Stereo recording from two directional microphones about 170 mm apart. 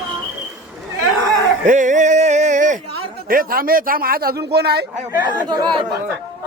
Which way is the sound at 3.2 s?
60° right (ahead or behind).